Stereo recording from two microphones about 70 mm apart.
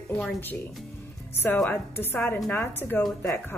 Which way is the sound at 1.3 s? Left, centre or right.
Left.